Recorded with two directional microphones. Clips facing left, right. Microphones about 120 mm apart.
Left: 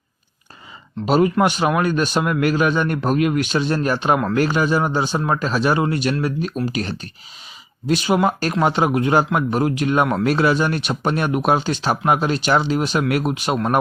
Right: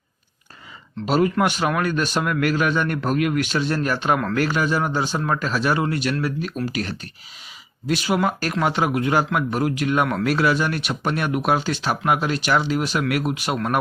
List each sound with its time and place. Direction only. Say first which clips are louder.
1.0 s a man's voice: left 3 dB; 20° left (ahead or behind)